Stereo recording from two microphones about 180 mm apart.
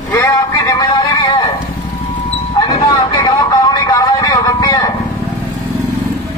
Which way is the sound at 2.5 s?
25° left (ahead or behind).